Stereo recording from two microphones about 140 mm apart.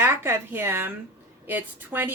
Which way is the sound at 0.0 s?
15° right (ahead or behind).